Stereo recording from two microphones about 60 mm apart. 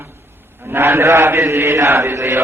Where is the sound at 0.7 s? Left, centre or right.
Right.